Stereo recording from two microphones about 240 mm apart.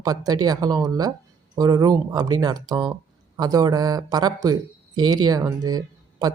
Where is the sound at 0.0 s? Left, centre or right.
Centre.